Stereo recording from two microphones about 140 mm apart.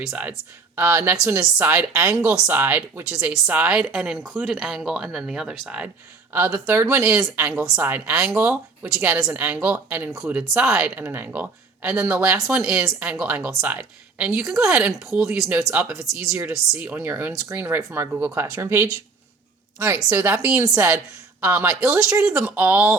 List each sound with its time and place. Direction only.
0.0 s speech: 5° right (ahead or behind)